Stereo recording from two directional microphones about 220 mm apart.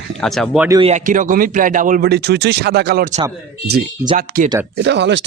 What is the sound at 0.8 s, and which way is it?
A man's voice, 35° right (ahead or behind).